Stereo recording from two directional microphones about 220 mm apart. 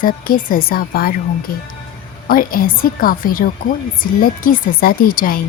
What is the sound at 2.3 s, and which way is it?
A woman's voice, 40° left (ahead or behind).